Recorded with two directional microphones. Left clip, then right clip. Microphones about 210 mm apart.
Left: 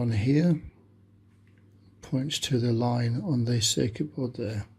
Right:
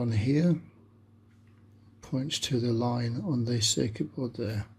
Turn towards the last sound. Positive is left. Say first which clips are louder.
# left 2 dB
turn(degrees=5)  # may be behind; listen again after turning